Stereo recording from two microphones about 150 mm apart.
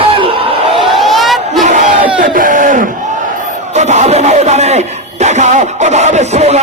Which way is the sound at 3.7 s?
50° right (ahead or behind).